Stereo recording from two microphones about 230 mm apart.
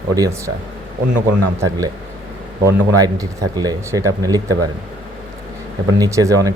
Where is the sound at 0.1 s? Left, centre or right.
Centre.